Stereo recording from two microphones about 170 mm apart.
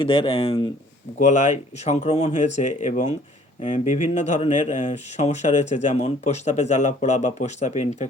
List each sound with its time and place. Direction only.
0.0 s speech: 30° left (ahead or behind)
1.2 s speech: 45° left (ahead or behind)